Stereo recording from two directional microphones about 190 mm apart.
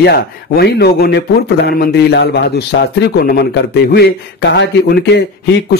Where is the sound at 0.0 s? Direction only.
60° left (ahead or behind).